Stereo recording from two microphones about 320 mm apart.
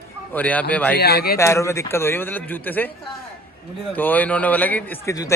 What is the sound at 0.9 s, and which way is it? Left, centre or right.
Speech, left.